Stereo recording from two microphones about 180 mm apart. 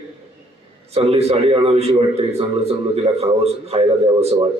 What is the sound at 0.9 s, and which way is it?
A man's voice, 35° right (ahead or behind).